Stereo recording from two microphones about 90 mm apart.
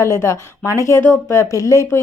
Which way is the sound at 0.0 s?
30° left (ahead or behind).